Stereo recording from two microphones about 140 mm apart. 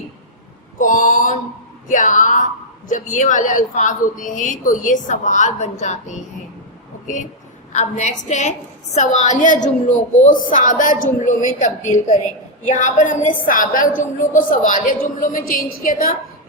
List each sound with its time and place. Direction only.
0.8 s mantra: 65° left (ahead or behind)
1.9 s a woman's voice: 65° left (ahead or behind)
7.7 s a woman's voice: 55° left (ahead or behind); by 16.1 s 85° left